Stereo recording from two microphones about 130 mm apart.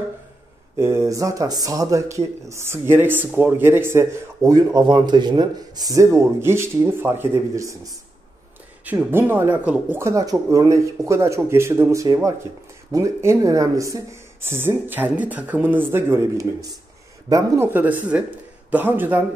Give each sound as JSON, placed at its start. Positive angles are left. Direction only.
{"t": 0.7, "sound": "speech", "side_deg": -20}
{"t": 9.1, "sound": "speech", "side_deg": -15}